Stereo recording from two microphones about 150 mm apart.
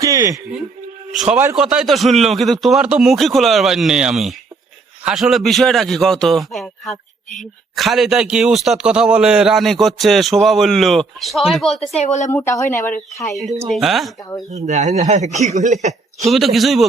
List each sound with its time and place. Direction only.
0.0 s music: 20° right (ahead or behind)
1.1 s a man's voice: 5° right (ahead or behind)
11.9 s speech: 50° left (ahead or behind)
12.3 s speech: 15° left (ahead or behind)
13.7 s a man's voice: centre (ahead or behind)
14.5 s speech: 50° right (ahead or behind)
16.2 s a man's voice: centre (ahead or behind)